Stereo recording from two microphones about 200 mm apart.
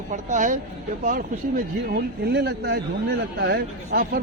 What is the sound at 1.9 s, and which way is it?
Speech, 55° right (ahead or behind).